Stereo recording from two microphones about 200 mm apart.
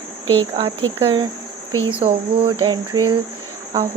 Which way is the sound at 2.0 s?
25° right (ahead or behind).